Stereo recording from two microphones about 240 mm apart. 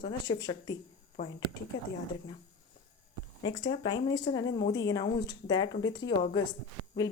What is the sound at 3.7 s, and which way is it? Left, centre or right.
Speech, centre.